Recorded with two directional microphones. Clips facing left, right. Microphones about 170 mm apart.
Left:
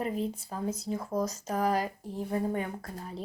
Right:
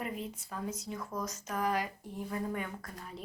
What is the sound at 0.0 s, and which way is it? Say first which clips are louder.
Speech: left 7 dB; 35° left (ahead or behind).